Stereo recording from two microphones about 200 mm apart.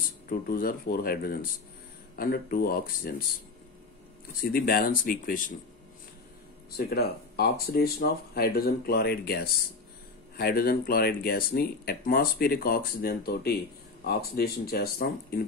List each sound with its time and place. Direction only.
0.3 s speech: 45° left (ahead or behind)
4.4 s speech: 45° left (ahead or behind)
6.7 s speech: 50° left (ahead or behind)